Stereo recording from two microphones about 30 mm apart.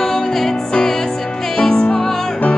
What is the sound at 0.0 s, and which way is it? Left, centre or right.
Music, centre.